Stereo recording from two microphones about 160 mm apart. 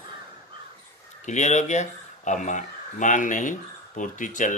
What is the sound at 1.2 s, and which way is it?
Speech, 45° left (ahead or behind).